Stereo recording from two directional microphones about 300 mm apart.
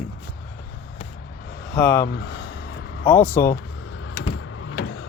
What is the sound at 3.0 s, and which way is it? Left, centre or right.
Speech, centre.